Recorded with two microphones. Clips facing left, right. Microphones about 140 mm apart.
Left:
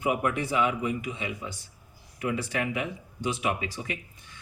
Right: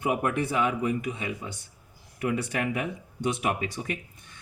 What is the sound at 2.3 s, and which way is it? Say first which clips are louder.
Speech: right 1 dB; 50° right (ahead or behind).